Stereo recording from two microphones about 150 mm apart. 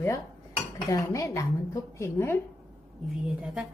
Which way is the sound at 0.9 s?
20° left (ahead or behind).